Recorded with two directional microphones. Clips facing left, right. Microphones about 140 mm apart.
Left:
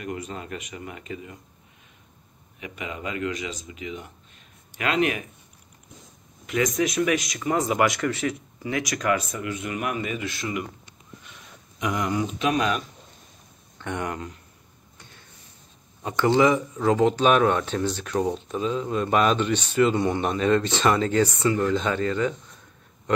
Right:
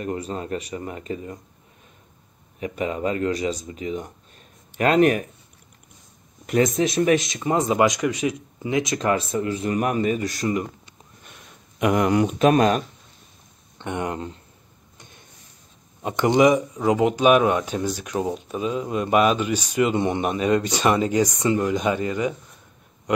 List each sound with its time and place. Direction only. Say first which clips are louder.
0.0 s speech: right 5 dB; 35° right (ahead or behind)
2.6 s speech: right 8 dB; 40° right (ahead or behind)
6.6 s speech: right 3 dB; 30° right (ahead or behind)
11.8 s speech: right 7 dB; 60° right (ahead or behind)
12.4 s speech: right 7 dB; 45° right (ahead or behind)
13.7 s speech: right 3 dB; 25° right (ahead or behind)
16.0 s speech: right 2 dB; 20° right (ahead or behind)